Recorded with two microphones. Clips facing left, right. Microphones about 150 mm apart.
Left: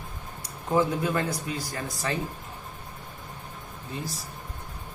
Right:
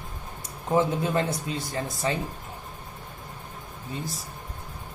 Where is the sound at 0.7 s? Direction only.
20° right (ahead or behind).